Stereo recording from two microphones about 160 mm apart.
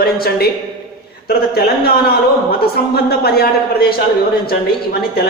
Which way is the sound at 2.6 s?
75° left (ahead or behind).